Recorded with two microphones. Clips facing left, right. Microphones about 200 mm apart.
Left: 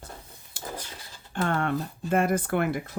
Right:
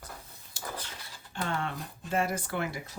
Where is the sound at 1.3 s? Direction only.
55° left (ahead or behind).